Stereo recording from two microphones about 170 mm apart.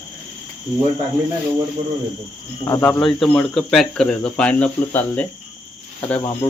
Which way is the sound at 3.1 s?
Centre (ahead or behind).